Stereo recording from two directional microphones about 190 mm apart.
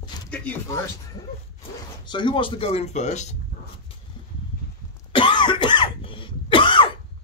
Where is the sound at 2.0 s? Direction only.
25° left (ahead or behind).